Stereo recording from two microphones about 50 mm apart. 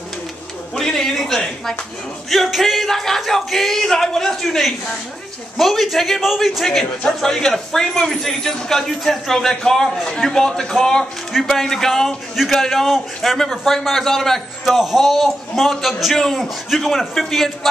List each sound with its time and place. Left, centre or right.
0.7 s a man's voice: centre
14.8 s speech: centre